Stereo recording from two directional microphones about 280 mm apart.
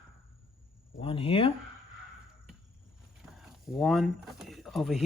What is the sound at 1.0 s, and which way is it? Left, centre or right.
Speech, centre.